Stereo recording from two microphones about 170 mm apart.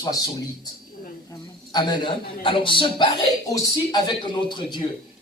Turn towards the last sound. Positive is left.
turn(degrees=25)  # may be behind; listen again after turning